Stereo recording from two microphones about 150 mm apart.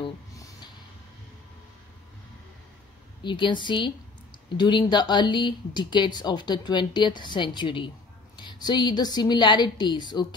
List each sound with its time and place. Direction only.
3.3 s a woman's voice: 30° left (ahead or behind)